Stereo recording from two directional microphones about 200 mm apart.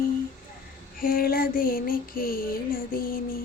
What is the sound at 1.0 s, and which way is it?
Female singing, 45° left (ahead or behind).